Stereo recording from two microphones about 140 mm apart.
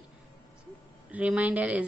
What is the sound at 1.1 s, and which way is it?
Speech, 10° right (ahead or behind).